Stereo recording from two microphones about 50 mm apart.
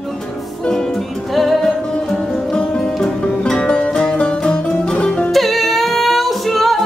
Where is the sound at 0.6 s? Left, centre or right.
Centre.